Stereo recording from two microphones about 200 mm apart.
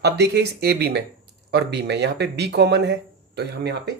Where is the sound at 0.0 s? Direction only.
55° right (ahead or behind).